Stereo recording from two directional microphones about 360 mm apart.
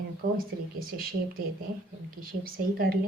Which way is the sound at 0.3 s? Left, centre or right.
Right.